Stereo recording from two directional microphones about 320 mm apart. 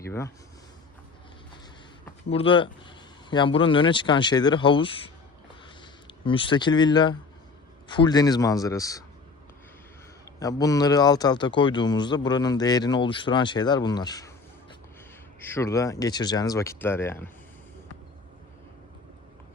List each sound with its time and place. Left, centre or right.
0.0 s speech: centre
2.3 s speech: centre
6.2 s speech: centre
10.4 s speech: centre
15.4 s speech: centre